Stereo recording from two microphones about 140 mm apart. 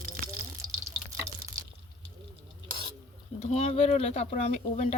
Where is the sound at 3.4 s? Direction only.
50° left (ahead or behind).